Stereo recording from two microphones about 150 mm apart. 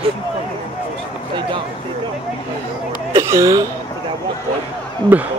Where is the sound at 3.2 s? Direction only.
20° right (ahead or behind).